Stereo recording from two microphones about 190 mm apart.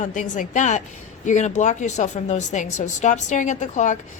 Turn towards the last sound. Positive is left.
turn(degrees=40)  # may be behind; listen again after turning